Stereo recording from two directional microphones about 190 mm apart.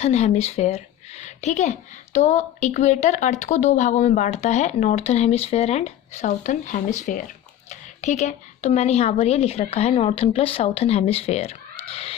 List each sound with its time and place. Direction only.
0.0 s a woman's voice: 35° left (ahead or behind)